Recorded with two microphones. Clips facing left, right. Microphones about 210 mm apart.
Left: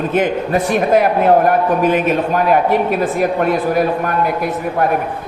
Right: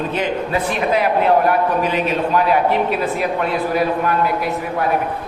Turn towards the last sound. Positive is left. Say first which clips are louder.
# left 2 dB
turn(degrees=50)  # may be behind; listen again after turning